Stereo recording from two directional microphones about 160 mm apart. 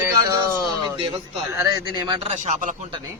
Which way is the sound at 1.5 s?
25° right (ahead or behind).